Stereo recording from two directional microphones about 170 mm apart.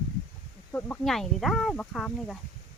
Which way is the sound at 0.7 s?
10° left (ahead or behind).